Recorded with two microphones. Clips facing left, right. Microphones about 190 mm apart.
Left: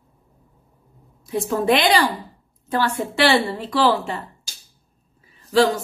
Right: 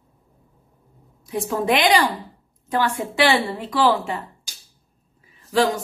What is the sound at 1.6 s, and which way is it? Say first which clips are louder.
A woman's voice: even; 10° right (ahead or behind).